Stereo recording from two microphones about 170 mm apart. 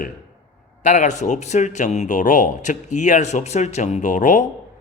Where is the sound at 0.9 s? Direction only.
45° left (ahead or behind).